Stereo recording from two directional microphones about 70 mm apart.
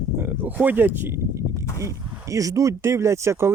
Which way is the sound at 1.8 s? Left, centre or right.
Right.